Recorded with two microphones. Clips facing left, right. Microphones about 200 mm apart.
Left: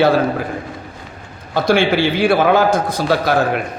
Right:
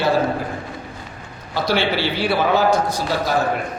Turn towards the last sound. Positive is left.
turn(degrees=60)  # may be behind; listen again after turning